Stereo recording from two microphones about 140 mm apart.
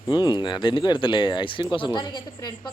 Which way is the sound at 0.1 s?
30° left (ahead or behind).